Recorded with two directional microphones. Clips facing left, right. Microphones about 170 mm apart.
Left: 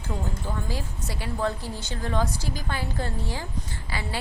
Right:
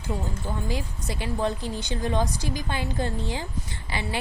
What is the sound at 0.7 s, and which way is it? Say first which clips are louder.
A woman's voice: right 2 dB; 20° right (ahead or behind).